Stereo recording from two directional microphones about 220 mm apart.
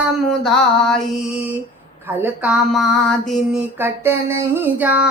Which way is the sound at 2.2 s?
10° right (ahead or behind).